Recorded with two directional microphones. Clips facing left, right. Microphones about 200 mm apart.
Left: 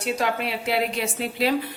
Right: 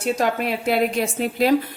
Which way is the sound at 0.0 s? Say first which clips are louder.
Right 4 dB; 45° right (ahead or behind).